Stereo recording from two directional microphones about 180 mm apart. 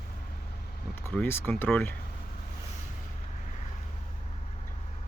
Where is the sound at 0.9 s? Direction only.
10° left (ahead or behind).